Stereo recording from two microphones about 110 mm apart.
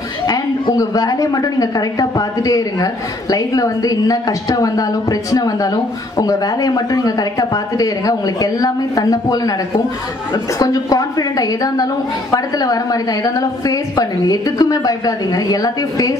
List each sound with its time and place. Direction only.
0.3 s a woman's voice: 35° left (ahead or behind)